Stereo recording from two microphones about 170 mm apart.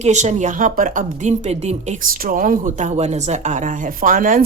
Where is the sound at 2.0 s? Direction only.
55° right (ahead or behind).